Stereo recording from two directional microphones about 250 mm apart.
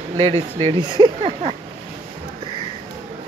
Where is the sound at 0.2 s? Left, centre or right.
Right.